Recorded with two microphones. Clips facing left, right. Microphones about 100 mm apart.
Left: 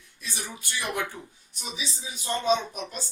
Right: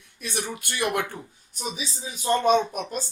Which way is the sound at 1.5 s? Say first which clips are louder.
Right 4 dB; 45° right (ahead or behind).